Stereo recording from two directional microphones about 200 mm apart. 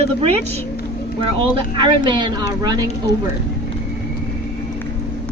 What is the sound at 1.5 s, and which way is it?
A woman's voice, 25° right (ahead or behind).